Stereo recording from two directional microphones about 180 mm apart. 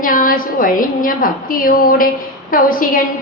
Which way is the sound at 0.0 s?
50° left (ahead or behind).